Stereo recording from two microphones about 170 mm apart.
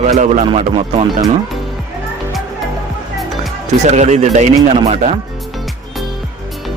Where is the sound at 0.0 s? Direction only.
45° right (ahead or behind).